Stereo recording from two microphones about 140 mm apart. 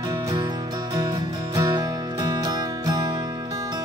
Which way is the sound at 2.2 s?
30° right (ahead or behind).